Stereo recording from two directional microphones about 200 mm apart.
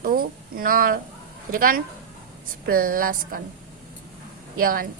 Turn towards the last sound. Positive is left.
turn(degrees=-45)  # may be behind; listen again after turning